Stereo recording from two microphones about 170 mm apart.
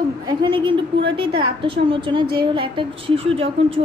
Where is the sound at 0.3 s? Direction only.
25° right (ahead or behind).